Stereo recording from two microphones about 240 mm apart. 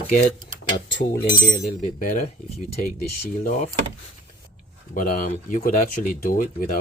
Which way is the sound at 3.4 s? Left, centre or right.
Left.